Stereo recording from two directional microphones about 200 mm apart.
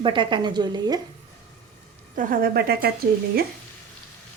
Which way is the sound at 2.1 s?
45° right (ahead or behind).